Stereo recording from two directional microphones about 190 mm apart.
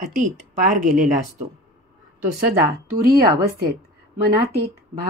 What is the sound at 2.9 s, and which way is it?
Speech, 50° right (ahead or behind).